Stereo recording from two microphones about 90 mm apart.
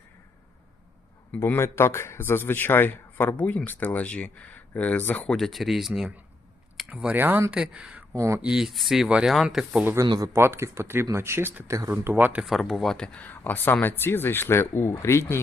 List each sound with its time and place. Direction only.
1.5 s speech: 30° left (ahead or behind)
5.2 s speech: 5° left (ahead or behind); by 7.2 s 10° right (ahead or behind)
7.2 s speech: 25° right (ahead or behind)
7.5 s speech: 10° right (ahead or behind)
8.1 s speech: 35° right (ahead or behind)
8.4 s speech: 5° right (ahead or behind)
9.8 s speech: 30° right (ahead or behind)
12.4 s speech: centre (ahead or behind)
13.1 s speech: 20° left (ahead or behind)